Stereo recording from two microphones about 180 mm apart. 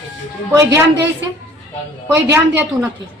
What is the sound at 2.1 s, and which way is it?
Speech, 15° right (ahead or behind).